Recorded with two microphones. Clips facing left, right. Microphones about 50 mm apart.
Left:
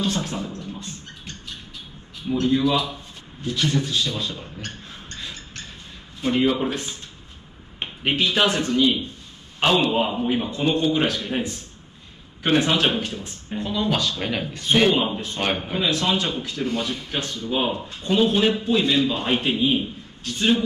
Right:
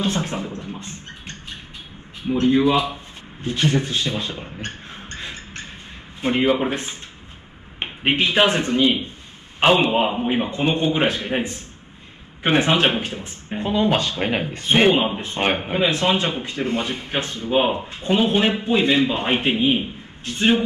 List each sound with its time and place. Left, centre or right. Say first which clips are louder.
0.0 s music: right 2 dB; right
2.2 s speech: right 3 dB; right
3.4 s a sound: right 3 dB; right
6.2 s speech: right 2 dB; right